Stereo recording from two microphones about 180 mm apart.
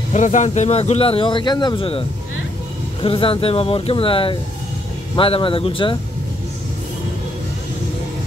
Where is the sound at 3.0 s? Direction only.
30° left (ahead or behind).